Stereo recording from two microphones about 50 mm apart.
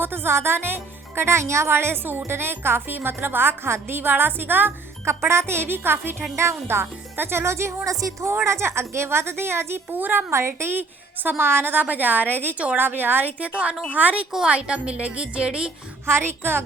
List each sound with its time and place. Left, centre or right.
0.0 s speech: right
5.0 s speech: right
6.3 s speech: right
11.7 s a woman's voice: right
13.5 s a woman's voice: right
16.0 s speech: right